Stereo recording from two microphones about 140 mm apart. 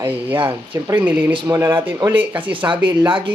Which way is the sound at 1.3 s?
35° right (ahead or behind).